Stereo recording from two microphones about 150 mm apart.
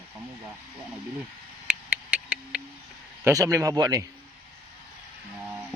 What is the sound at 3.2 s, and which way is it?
Speech, 20° right (ahead or behind).